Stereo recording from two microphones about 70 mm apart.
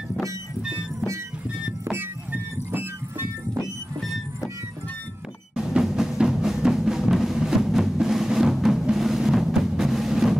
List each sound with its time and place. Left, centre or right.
2.3 s music: right
5.7 s music: centre